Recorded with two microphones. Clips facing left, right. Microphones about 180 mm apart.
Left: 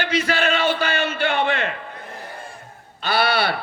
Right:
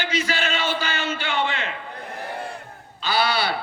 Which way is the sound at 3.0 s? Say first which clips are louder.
Left 2 dB; 60° left (ahead or behind).